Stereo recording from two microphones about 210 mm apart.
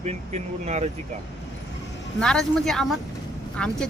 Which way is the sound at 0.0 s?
30° right (ahead or behind).